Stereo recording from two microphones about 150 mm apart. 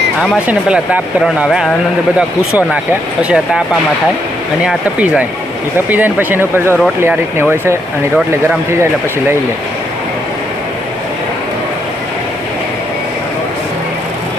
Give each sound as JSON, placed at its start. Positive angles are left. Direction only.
{"t": 0.4, "sound": "speech", "side_deg": -10}
{"t": 2.7, "sound": "speech", "side_deg": -10}
{"t": 4.6, "sound": "speech", "side_deg": -10}